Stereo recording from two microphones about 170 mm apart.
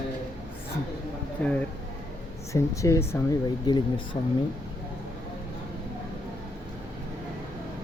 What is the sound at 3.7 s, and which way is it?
Speech, 25° left (ahead or behind).